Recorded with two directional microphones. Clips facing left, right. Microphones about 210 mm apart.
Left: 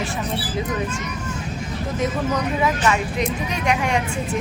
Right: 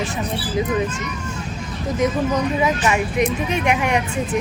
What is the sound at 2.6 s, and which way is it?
Speech, 20° right (ahead or behind).